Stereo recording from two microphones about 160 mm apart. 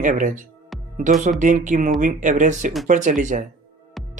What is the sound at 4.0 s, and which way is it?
Music, centre (ahead or behind).